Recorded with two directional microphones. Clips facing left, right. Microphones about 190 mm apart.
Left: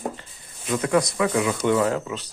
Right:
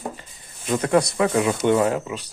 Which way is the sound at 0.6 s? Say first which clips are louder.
Right 2 dB; 35° right (ahead or behind).